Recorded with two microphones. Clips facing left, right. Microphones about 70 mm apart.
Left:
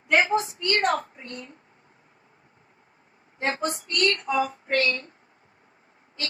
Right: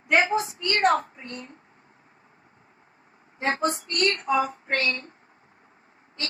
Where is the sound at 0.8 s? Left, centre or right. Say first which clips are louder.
Right 5 dB; right.